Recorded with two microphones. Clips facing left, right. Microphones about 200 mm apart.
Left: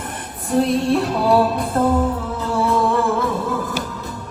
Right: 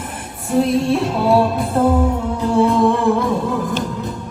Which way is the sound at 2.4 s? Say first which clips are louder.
Right 5 dB; 15° right (ahead or behind).